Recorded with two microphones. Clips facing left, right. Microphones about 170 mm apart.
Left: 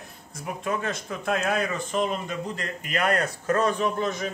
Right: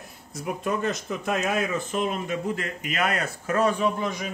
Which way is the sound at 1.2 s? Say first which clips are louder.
Left 1 dB; centre (ahead or behind).